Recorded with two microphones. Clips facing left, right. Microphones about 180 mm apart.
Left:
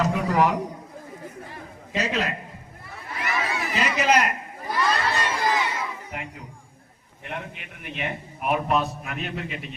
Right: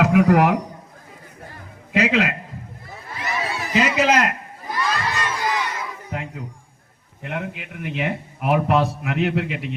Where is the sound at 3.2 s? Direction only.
30° right (ahead or behind).